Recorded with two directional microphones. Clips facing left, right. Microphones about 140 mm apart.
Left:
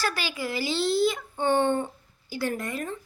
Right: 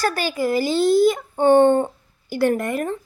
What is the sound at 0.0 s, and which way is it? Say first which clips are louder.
Speech: right 8 dB; 45° right (ahead or behind).